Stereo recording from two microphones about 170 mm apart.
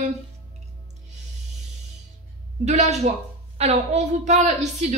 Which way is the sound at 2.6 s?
40° right (ahead or behind).